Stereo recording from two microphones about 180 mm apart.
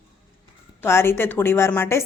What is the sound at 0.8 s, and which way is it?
Speech, 15° left (ahead or behind).